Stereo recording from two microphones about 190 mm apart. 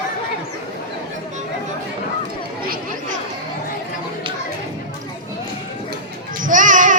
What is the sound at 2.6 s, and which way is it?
Chatter, 50° right (ahead or behind).